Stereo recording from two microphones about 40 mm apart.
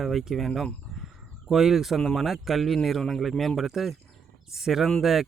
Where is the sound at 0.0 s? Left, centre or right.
Centre.